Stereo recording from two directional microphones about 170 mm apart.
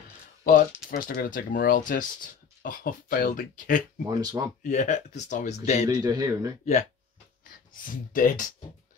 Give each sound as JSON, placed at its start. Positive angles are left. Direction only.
{"t": 0.5, "sound": "speech", "side_deg": 55}
{"t": 4.2, "sound": "speech", "side_deg": -20}
{"t": 4.6, "sound": "speech", "side_deg": 45}
{"t": 5.9, "sound": "speech", "side_deg": -20}
{"t": 6.6, "sound": "speech", "side_deg": 45}